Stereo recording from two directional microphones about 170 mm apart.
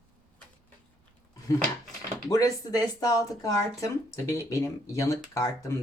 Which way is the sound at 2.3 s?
20° left (ahead or behind).